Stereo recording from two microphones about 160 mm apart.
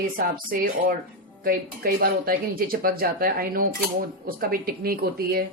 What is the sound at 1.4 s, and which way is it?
Speech, 65° right (ahead or behind).